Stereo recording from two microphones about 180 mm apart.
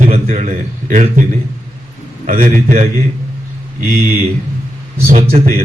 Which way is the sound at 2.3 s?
45° right (ahead or behind).